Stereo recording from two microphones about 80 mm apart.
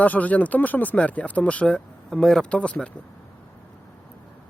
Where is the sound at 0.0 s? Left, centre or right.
Centre.